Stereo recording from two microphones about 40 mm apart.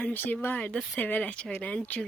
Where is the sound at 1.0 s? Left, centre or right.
Left.